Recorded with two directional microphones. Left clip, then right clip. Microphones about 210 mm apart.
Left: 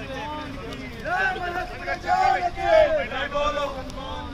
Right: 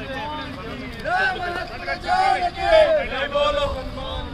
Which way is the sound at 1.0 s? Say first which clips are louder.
Right 3 dB; 45° right (ahead or behind).